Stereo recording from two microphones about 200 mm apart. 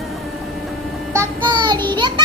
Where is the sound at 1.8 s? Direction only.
25° right (ahead or behind).